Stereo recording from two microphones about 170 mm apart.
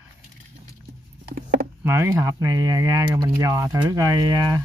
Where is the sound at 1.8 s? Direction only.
15° right (ahead or behind).